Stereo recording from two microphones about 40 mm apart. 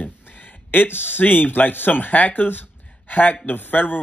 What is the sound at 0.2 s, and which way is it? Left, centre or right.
A man's voice, left.